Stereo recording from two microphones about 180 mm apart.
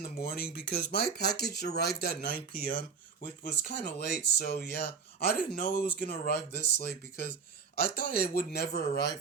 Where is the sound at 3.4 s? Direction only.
60° left (ahead or behind).